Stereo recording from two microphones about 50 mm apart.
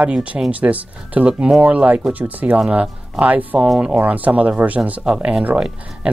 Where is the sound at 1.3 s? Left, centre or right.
Centre.